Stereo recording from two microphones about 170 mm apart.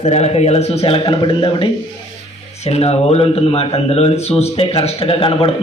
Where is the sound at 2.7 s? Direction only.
40° left (ahead or behind).